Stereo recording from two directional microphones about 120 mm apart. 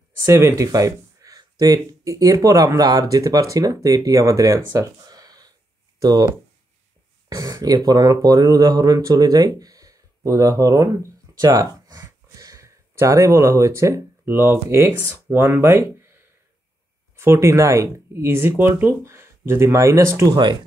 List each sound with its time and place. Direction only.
0.5 s speech: 30° right (ahead or behind)
17.2 s speech: 25° right (ahead or behind)